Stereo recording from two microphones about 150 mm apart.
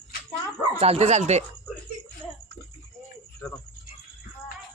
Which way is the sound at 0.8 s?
45° right (ahead or behind).